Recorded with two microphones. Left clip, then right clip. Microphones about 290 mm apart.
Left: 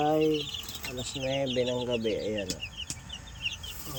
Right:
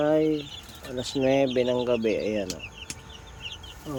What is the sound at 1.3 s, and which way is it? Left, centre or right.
Speech, centre.